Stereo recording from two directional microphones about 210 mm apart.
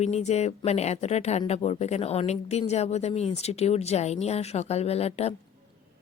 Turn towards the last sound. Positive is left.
turn(degrees=30)  # may be behind; listen again after turning